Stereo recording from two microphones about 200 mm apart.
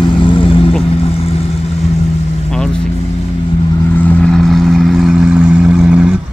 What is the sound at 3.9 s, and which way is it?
Vehicle, 10° left (ahead or behind).